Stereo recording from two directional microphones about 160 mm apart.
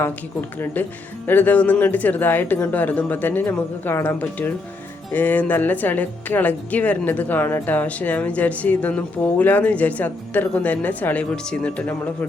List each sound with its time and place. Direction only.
0.6 s speech: 10° left (ahead or behind)